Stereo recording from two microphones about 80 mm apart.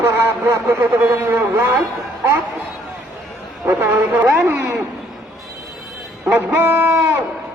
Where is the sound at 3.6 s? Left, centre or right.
Right.